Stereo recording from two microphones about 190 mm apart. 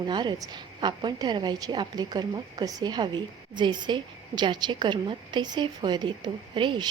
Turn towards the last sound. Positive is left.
turn(degrees=-25)  # may be behind; listen again after turning